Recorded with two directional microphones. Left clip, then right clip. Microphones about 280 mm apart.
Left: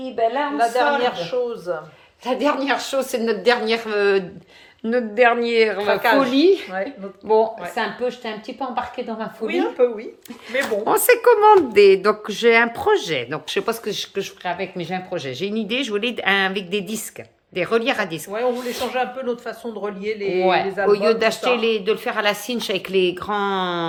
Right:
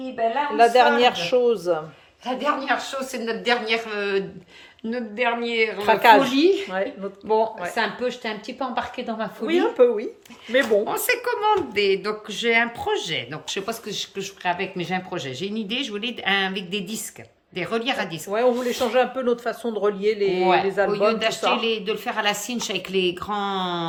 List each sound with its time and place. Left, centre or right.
0.5 s speech: right
2.2 s a woman's voice: left; by 5.8 s centre
5.8 s speech: right
6.3 s a woman's voice: centre
9.5 s speech: right
10.8 s speech: centre
18.3 s speech: right
20.8 s speech: centre